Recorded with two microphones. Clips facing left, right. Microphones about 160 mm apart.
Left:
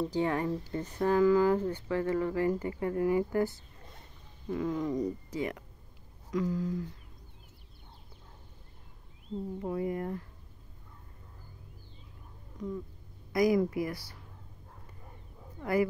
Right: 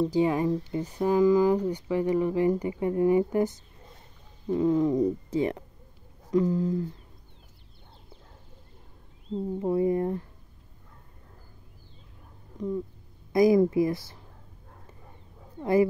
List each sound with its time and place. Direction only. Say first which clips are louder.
0.0 s speech: right 6 dB; 15° right (ahead or behind); by 6.9 s 30° right (ahead or behind)
9.3 s speech: right 7 dB; 30° right (ahead or behind)
13.3 s speech: right 6 dB; 25° right (ahead or behind)
15.6 s speech: right 6 dB; 25° right (ahead or behind)